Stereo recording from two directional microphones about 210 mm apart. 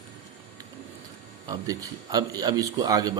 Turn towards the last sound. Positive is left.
turn(degrees=-15)  # may be behind; listen again after turning